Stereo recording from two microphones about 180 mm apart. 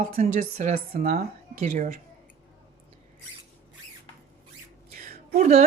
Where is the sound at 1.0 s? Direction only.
55° right (ahead or behind).